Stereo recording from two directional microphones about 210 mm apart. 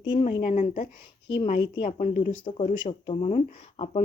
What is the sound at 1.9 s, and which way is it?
Speech, 35° left (ahead or behind).